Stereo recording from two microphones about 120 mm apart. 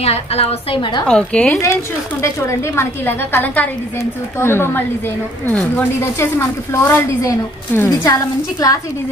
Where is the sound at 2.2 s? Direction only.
20° left (ahead or behind).